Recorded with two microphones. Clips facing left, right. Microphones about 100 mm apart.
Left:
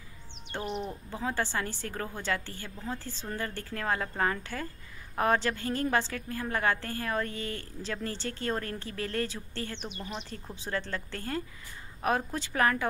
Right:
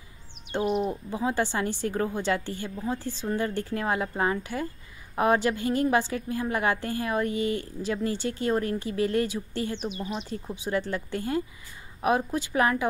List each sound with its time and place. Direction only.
0.5 s a woman's voice: 10° right (ahead or behind)